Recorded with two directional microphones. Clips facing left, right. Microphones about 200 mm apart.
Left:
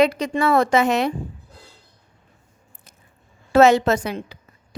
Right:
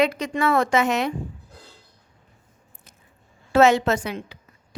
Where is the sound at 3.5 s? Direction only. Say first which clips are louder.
Left 3 dB; 40° left (ahead or behind).